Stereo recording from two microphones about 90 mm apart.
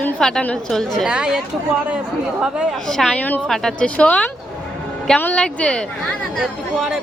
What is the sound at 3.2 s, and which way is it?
Speech, 20° left (ahead or behind).